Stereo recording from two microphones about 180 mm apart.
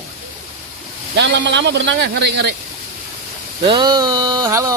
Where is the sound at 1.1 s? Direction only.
75° right (ahead or behind).